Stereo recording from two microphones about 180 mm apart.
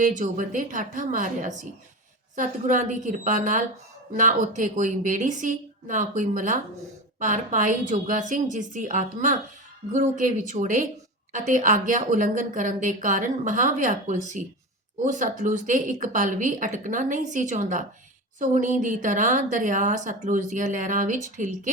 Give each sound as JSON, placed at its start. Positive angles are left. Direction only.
{"t": 0.0, "sound": "a woman's voice", "side_deg": -45}